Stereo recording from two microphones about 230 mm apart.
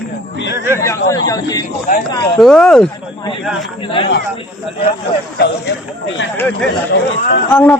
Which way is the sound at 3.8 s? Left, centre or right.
Left.